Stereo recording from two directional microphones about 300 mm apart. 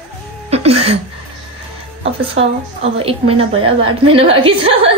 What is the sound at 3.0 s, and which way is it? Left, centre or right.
A woman's voice, centre.